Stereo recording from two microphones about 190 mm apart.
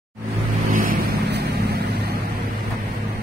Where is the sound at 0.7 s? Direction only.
45° right (ahead or behind).